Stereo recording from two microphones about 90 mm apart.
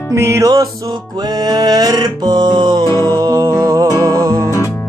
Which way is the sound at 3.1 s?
40° right (ahead or behind).